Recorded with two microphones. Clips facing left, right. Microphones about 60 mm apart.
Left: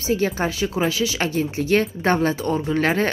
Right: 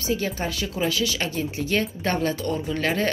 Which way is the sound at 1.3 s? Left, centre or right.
Left.